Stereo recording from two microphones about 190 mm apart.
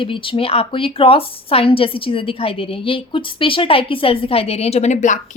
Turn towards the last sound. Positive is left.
turn(degrees=40)  # may be behind; listen again after turning